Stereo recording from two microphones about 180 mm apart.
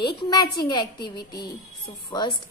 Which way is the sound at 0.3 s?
25° left (ahead or behind).